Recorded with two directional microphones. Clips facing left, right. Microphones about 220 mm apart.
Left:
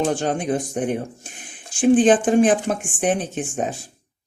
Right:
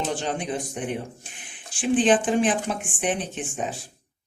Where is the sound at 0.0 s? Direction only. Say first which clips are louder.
Left 6 dB; 50° left (ahead or behind).